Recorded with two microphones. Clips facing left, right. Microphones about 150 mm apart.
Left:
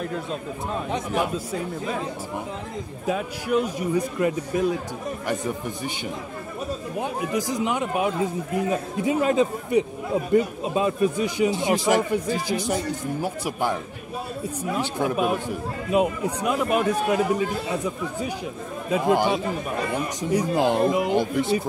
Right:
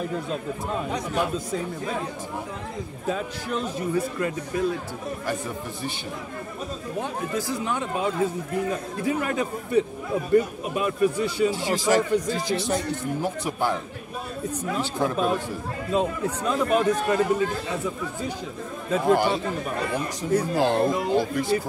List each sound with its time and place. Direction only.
1.1 s a man's voice: 10° left (ahead or behind)
3.1 s a man's voice: 10° left (ahead or behind)
7.0 s a man's voice: 15° left (ahead or behind)
18.9 s a man's voice: 10° left (ahead or behind)